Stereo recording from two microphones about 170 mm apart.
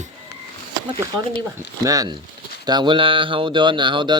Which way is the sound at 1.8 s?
20° right (ahead or behind).